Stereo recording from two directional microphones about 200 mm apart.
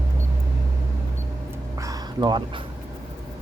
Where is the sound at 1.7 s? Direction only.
15° right (ahead or behind).